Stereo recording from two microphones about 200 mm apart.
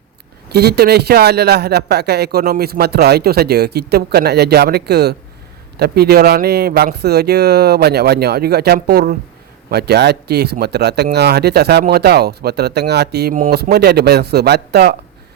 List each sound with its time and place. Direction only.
0.4 s a man's voice: 55° right (ahead or behind)